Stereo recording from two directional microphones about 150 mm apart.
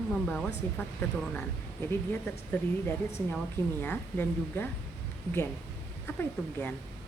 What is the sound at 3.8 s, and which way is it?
Speech, 10° left (ahead or behind).